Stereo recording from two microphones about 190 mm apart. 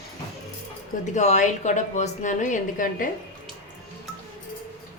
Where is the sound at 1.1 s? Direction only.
40° left (ahead or behind).